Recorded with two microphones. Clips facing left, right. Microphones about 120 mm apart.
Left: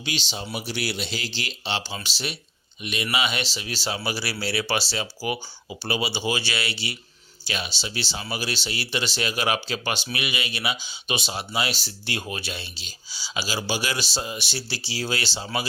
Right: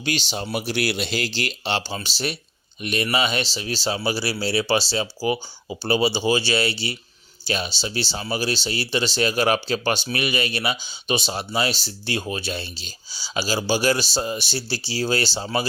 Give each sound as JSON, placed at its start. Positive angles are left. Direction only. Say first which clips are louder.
{"t": 0.0, "sound": "speech", "louder": "right 5 dB", "side_deg": -50}
{"t": 2.0, "sound": "speech", "louder": "right 5 dB", "side_deg": -35}